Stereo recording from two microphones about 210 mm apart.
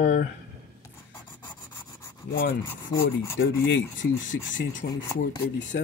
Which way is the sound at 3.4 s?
65° left (ahead or behind).